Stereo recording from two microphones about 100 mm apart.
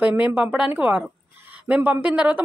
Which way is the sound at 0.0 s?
15° right (ahead or behind).